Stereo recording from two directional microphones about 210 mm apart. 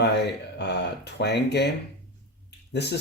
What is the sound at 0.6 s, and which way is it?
Speech, 55° left (ahead or behind).